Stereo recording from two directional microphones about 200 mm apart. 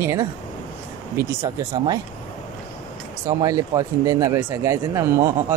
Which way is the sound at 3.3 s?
15° right (ahead or behind).